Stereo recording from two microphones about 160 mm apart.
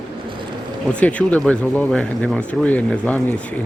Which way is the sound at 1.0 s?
10° left (ahead or behind).